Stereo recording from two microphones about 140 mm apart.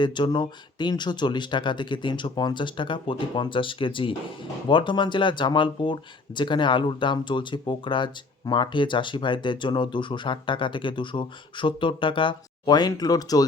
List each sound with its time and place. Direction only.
0.0 s speech: 35° left (ahead or behind)